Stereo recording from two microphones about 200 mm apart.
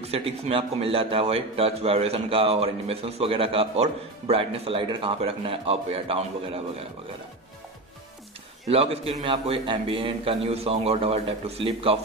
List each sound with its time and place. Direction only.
0.0 s a man's voice: 30° right (ahead or behind)
8.6 s a man's voice: 30° right (ahead or behind)